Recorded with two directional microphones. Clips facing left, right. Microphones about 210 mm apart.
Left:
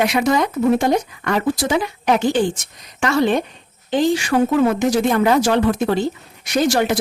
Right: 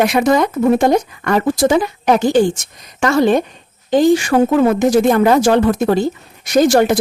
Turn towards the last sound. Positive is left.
turn(degrees=-45)  # may be behind; listen again after turning